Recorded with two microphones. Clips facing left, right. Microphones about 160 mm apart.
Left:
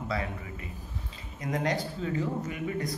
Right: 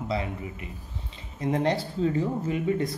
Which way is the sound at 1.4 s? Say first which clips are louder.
Right 5 dB; 30° right (ahead or behind).